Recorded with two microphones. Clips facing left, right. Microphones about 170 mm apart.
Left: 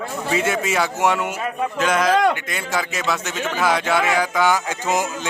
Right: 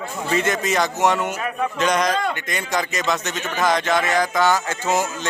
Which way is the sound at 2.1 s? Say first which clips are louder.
Left 6 dB; 90° left.